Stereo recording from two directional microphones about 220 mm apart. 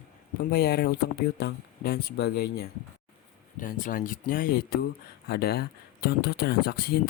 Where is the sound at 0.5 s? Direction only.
45° left (ahead or behind).